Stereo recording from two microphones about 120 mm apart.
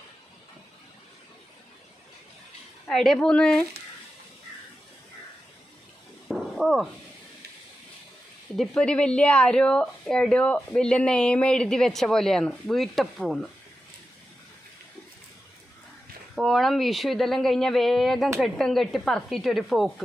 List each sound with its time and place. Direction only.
2.9 s speech: 5° left (ahead or behind)
6.2 s a sound: centre (ahead or behind)
8.5 s speech: 5° left (ahead or behind)
16.3 s speech: centre (ahead or behind)